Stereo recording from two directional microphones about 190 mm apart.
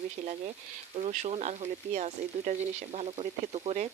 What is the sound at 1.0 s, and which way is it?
Speech, 35° right (ahead or behind).